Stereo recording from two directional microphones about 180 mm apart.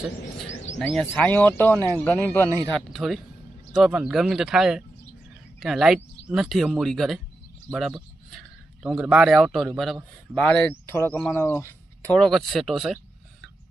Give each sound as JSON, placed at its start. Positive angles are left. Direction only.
{"t": 0.4, "sound": "bird", "side_deg": 40}
{"t": 0.8, "sound": "a man's voice", "side_deg": 5}
{"t": 2.5, "sound": "speech", "side_deg": -15}
{"t": 2.7, "sound": "a man's voice", "side_deg": 0}